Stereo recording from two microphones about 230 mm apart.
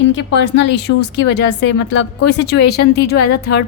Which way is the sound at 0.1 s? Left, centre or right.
Left.